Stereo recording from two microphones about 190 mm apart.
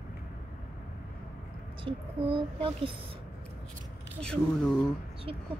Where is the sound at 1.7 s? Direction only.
25° right (ahead or behind).